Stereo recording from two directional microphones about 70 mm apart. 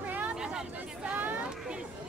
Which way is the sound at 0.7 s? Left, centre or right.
Centre.